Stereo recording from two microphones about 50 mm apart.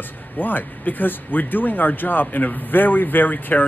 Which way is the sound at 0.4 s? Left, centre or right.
Left.